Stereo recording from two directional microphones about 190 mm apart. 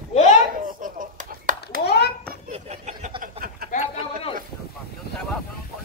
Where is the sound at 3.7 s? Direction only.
35° left (ahead or behind).